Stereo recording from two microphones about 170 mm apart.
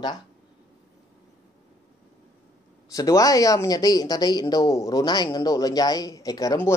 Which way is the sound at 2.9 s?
20° left (ahead or behind).